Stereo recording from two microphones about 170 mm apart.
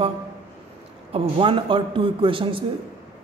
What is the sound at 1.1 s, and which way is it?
A man's voice, 30° right (ahead or behind).